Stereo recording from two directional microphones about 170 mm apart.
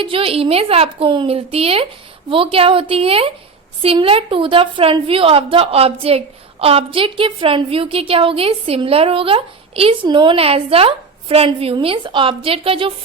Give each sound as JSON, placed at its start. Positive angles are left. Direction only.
{"t": 0.0, "sound": "a woman's voice", "side_deg": -35}